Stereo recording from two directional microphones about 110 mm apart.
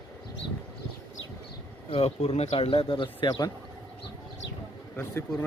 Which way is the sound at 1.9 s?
65° left (ahead or behind).